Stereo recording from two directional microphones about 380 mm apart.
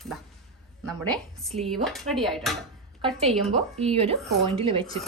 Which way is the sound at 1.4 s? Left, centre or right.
Centre.